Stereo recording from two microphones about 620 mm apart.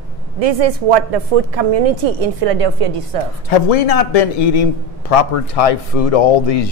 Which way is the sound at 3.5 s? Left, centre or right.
Left.